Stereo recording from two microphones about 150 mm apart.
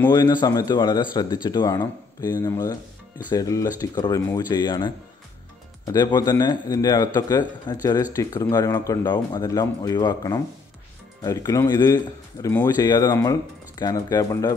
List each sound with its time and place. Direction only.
0.1 s speech: 30° left (ahead or behind)